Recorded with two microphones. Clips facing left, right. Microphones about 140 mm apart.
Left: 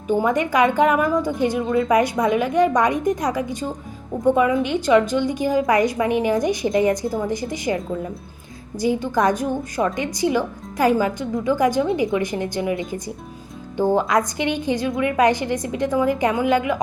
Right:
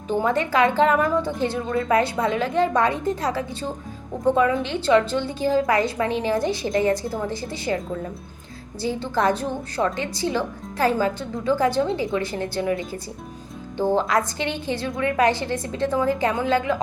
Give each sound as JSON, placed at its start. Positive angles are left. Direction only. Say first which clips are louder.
{"t": 0.1, "sound": "a woman's voice", "louder": "left 2 dB", "side_deg": 15}
{"t": 8.8, "sound": "a woman's voice", "louder": "left 3 dB", "side_deg": 15}